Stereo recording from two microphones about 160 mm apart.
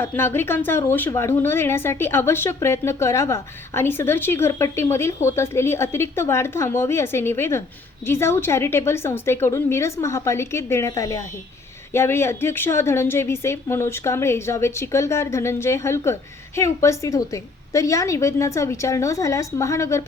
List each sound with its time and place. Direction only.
0.0 s a woman's voice: 15° left (ahead or behind)